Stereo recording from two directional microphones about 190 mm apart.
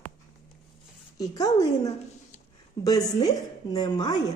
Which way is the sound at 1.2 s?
20° left (ahead or behind).